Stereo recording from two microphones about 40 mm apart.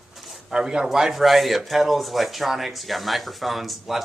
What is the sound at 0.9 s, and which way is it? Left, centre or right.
Speech, centre.